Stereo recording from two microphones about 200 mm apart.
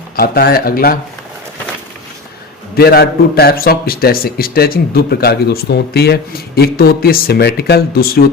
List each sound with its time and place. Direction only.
0.2 s a man's voice: 50° left (ahead or behind)
2.7 s a man's voice: 50° left (ahead or behind)